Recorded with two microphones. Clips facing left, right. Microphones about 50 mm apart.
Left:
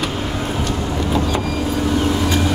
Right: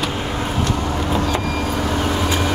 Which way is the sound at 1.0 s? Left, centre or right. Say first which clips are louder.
Left 2 dB; right.